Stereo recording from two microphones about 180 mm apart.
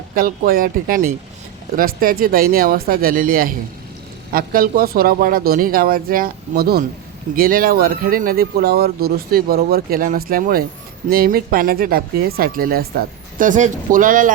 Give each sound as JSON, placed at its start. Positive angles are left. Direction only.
{"t": 0.1, "sound": "speech", "side_deg": -50}